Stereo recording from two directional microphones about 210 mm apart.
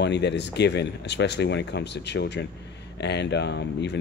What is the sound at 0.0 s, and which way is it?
Speech, 55° left (ahead or behind).